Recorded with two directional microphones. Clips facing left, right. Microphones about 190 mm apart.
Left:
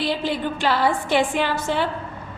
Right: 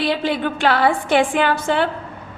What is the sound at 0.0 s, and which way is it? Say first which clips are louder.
A woman's voice: right 3 dB; 65° right (ahead or behind).